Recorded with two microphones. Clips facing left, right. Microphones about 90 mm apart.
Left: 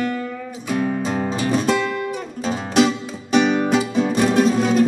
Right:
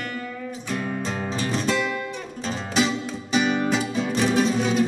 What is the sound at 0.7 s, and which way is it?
Music, 5° left (ahead or behind).